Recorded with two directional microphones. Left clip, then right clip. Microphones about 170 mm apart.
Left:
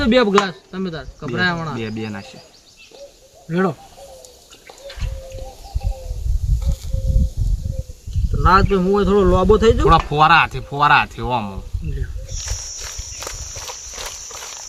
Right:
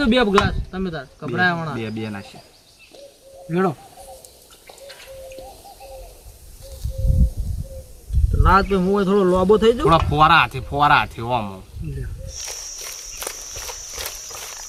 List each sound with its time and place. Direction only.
0.0 s speech: 15° left (ahead or behind)
3.5 s speech: 15° right (ahead or behind)
8.4 s speech: 20° left (ahead or behind)
9.8 s speech: centre (ahead or behind)
11.8 s speech: 10° right (ahead or behind)
13.9 s horse: 5° right (ahead or behind)